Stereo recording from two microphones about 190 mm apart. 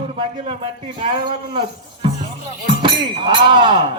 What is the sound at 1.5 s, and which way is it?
Speech, 25° right (ahead or behind).